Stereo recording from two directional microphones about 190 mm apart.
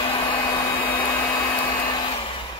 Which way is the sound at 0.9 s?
10° left (ahead or behind).